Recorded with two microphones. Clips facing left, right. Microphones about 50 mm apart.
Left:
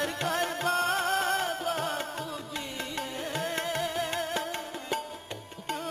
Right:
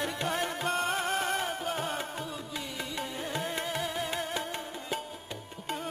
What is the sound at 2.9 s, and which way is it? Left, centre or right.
Carnatic music, centre.